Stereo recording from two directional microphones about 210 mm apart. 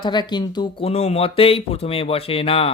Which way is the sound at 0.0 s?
20° left (ahead or behind).